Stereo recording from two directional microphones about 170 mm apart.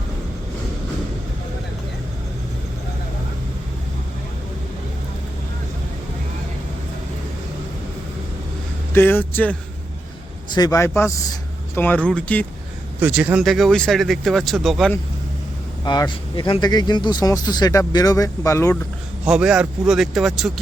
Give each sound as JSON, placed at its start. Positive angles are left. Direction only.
{"t": 8.9, "sound": "speech", "side_deg": 10}
{"t": 10.5, "sound": "speech", "side_deg": 20}
{"t": 13.0, "sound": "speech", "side_deg": -10}
{"t": 15.8, "sound": "speech", "side_deg": 25}
{"t": 19.2, "sound": "speech", "side_deg": -5}